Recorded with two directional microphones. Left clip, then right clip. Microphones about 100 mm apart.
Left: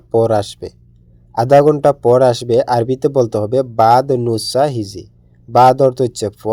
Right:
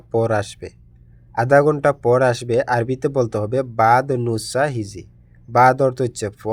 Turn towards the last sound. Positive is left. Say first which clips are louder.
# left 6 dB
turn(degrees=30)  # may be behind; listen again after turning